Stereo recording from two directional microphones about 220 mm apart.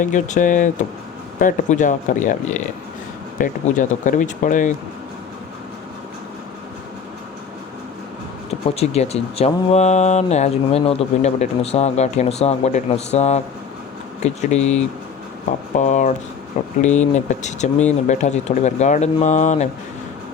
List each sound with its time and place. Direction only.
0.0 s speech: 35° left (ahead or behind)
8.4 s speech: 30° left (ahead or behind)